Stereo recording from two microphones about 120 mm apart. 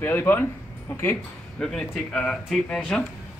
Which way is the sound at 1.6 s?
5° left (ahead or behind).